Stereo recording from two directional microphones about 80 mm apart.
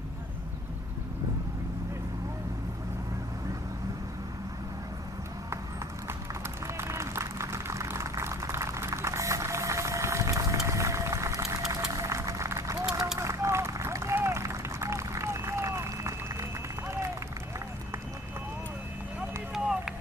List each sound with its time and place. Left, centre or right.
6.8 s applause: right
13.2 s a sound: right
19.5 s run: centre